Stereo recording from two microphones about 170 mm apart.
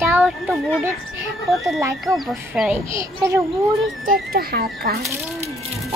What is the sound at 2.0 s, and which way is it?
Speech, centre (ahead or behind).